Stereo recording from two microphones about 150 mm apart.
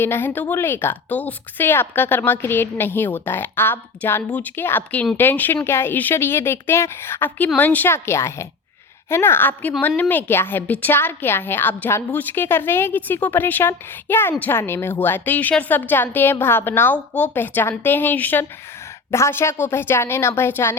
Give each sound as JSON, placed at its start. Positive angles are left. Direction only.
{"t": 0.0, "sound": "speech", "side_deg": 15}